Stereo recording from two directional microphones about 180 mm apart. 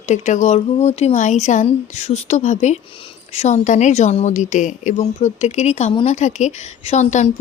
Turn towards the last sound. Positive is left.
turn(degrees=40)  # may be behind; listen again after turning